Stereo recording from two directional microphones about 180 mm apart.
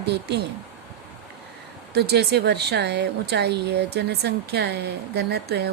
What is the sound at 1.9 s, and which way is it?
A woman's voice, 65° right (ahead or behind).